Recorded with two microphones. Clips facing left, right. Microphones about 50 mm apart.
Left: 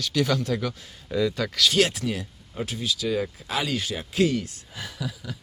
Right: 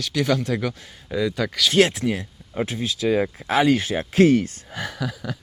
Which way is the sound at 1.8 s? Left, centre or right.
Right.